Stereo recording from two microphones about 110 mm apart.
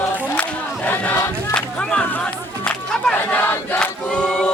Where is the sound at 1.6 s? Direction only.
10° left (ahead or behind).